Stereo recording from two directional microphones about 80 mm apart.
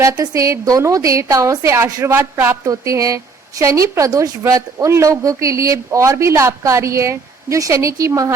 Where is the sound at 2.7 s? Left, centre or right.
Right.